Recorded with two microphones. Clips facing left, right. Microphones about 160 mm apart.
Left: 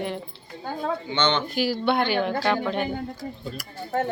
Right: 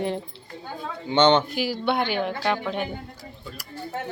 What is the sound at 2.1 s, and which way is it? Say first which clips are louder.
Speech: left 2 dB; 5° right (ahead or behind).